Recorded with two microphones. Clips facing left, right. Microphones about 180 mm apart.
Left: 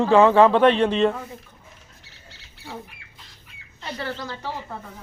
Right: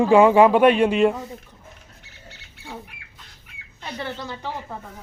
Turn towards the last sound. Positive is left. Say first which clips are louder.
# even
turn(degrees=-20)  # may be behind; listen again after turning